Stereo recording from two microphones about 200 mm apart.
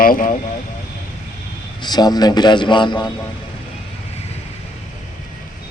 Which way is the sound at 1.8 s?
20° left (ahead or behind).